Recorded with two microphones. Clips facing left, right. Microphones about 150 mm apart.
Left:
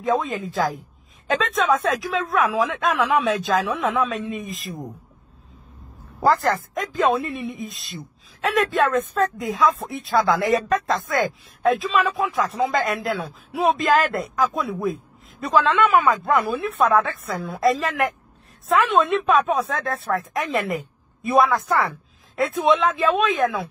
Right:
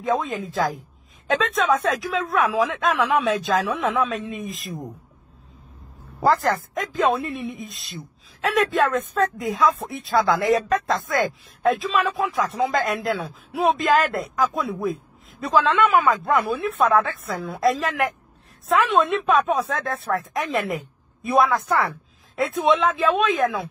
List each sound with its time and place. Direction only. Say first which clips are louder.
0.0 s speech: left 1 dB; centre (ahead or behind)
6.2 s speech: even; centre (ahead or behind)